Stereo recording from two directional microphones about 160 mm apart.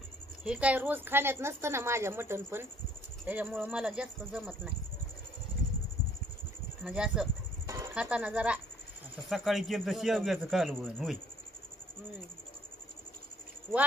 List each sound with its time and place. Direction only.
0.4 s a woman's voice: 5° right (ahead or behind)
6.8 s a man's voice: 5° right (ahead or behind)
7.6 s a sound: 20° right (ahead or behind)
7.9 s a woman's voice: 5° right (ahead or behind)